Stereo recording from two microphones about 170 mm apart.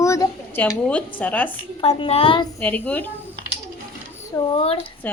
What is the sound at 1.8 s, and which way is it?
Speech, 35° left (ahead or behind).